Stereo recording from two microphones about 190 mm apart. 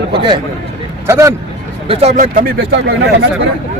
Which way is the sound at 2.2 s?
50° right (ahead or behind).